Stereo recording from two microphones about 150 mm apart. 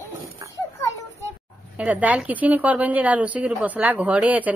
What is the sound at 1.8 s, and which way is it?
A woman's voice, 10° right (ahead or behind).